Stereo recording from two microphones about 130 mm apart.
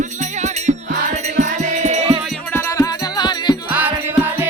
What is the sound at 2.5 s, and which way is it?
Music, 20° left (ahead or behind).